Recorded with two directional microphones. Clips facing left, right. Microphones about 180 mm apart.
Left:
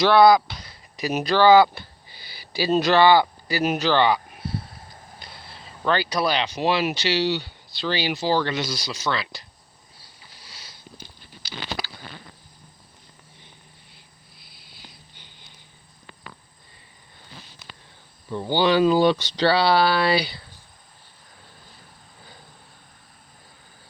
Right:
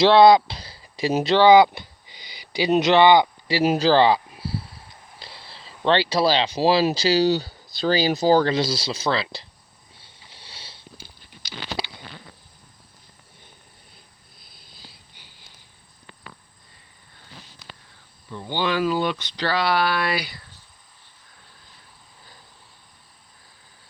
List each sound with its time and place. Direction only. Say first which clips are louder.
0.0 s speech: right 2 dB; 25° right (ahead or behind)
10.0 s sniff: right 1 dB; 25° right (ahead or behind)
15.1 s a sound: left 1 dB; 10° right (ahead or behind)
18.3 s speech: left 5 dB; 35° left (ahead or behind)